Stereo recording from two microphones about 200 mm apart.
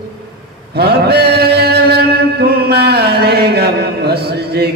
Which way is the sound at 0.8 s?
55° right (ahead or behind).